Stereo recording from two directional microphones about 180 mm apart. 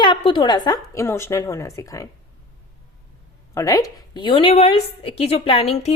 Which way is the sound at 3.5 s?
20° left (ahead or behind).